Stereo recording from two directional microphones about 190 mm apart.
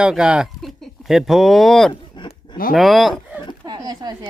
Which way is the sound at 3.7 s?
20° right (ahead or behind).